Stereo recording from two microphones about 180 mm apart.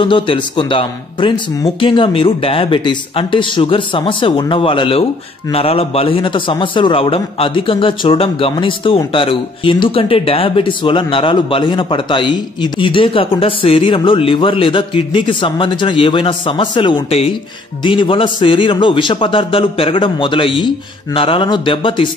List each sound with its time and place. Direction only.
0.0 s a man's voice: 30° left (ahead or behind)